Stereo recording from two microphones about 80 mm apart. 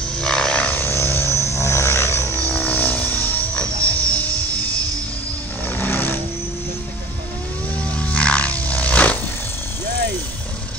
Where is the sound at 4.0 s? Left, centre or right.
Right.